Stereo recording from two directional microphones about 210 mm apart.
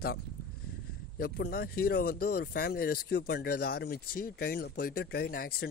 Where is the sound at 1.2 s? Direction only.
50° left (ahead or behind).